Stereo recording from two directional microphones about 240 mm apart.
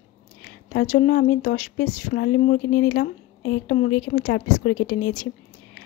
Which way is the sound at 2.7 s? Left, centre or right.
Left.